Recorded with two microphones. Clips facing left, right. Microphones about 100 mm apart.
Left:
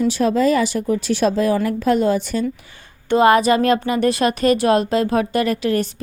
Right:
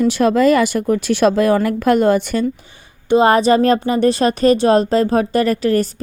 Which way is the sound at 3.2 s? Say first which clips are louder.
Right 1 dB; 30° right (ahead or behind).